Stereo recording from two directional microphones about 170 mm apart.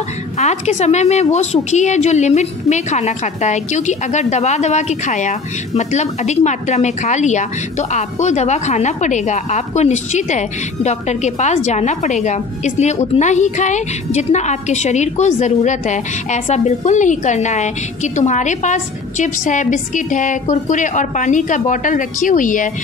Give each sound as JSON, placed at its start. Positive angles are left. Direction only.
{"t": 0.4, "sound": "a woman's voice", "side_deg": 40}